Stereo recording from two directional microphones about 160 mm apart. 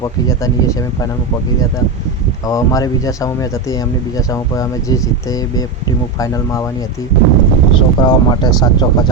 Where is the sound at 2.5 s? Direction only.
20° left (ahead or behind).